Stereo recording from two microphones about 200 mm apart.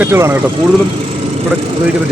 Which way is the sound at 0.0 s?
10° right (ahead or behind).